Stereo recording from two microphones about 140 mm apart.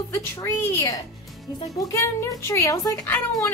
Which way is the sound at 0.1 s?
20° left (ahead or behind).